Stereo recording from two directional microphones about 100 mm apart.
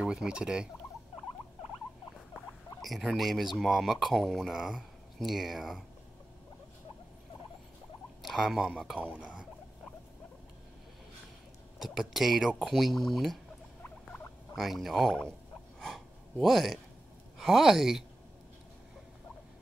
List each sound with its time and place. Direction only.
0.0 s speech: 10° right (ahead or behind)
2.8 s speech: centre (ahead or behind)
8.2 s a man's voice: centre (ahead or behind)
9.1 s speech: 10° right (ahead or behind)
11.8 s speech: 5° right (ahead or behind)
13.8 s rodents: 20° left (ahead or behind)
14.5 s speech: centre (ahead or behind)
15.8 s gasp: 5° left (ahead or behind)
17.4 s speech: centre (ahead or behind)